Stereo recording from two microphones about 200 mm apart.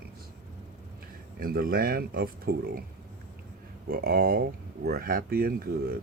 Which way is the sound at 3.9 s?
50° right (ahead or behind).